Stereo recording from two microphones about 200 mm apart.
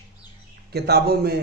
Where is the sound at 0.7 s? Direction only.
55° right (ahead or behind).